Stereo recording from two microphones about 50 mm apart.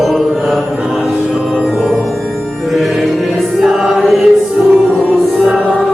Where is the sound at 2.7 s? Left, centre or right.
Centre.